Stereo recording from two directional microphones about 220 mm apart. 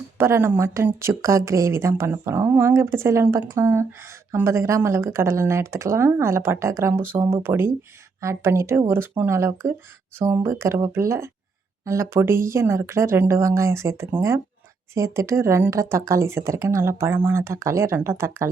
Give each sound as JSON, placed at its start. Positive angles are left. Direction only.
{"t": 0.2, "sound": "speech", "side_deg": -10}